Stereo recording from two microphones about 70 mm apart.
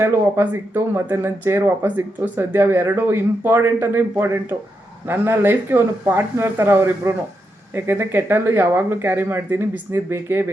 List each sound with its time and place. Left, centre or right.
0.0 s speech: right